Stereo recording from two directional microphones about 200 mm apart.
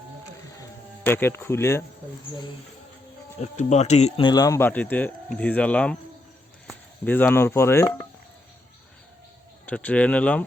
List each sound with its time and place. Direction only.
1.0 s speech: 10° left (ahead or behind)
3.4 s speech: 35° left (ahead or behind)
4.3 s speech: 15° left (ahead or behind)
9.6 s speech: 5° left (ahead or behind)